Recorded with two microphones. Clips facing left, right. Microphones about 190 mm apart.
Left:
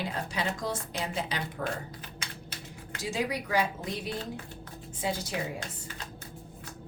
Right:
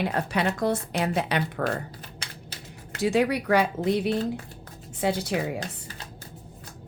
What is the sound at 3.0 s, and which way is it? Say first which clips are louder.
A woman's voice: right 9 dB; 65° right (ahead or behind).